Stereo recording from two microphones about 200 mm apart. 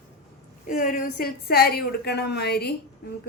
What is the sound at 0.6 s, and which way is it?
A woman's voice, 45° left (ahead or behind).